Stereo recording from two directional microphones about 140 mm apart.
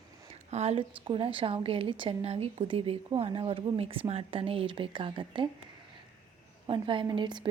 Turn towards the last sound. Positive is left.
turn(degrees=-35)  # may be behind; listen again after turning